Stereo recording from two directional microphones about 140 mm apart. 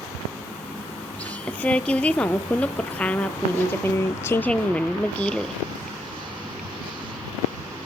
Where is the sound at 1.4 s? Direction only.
10° left (ahead or behind).